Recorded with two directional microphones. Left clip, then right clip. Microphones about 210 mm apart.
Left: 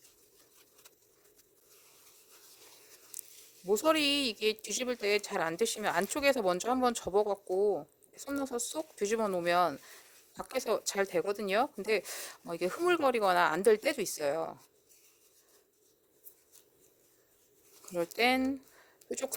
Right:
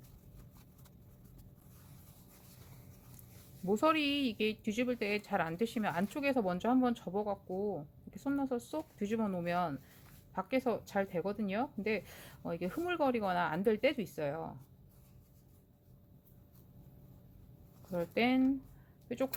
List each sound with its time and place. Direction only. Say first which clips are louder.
3.7 s a woman's voice: left 3 dB; 35° left (ahead or behind)
17.9 s speech: left 4 dB; 45° left (ahead or behind)